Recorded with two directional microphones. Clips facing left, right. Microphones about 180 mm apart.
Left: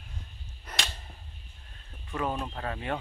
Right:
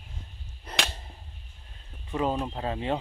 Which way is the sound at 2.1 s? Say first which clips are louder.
Right 4 dB; 20° right (ahead or behind).